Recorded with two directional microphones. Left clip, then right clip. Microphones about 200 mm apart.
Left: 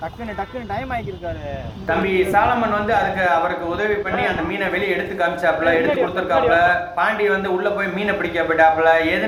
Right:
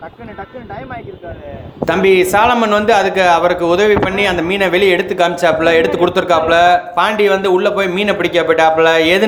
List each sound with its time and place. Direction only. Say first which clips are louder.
1.9 s a man's voice: right 7 dB; 55° right (ahead or behind)